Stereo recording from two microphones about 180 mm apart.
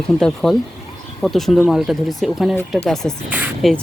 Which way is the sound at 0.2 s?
5° left (ahead or behind).